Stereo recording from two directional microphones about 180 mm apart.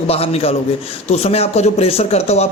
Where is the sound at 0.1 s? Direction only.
35° left (ahead or behind).